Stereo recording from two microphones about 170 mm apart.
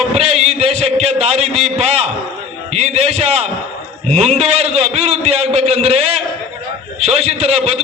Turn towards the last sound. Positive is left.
turn(degrees=-40)  # may be behind; listen again after turning